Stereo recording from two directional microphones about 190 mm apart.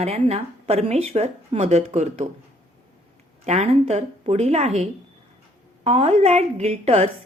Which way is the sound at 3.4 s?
35° right (ahead or behind).